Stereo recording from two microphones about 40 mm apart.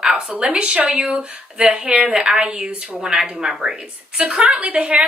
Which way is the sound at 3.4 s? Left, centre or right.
Centre.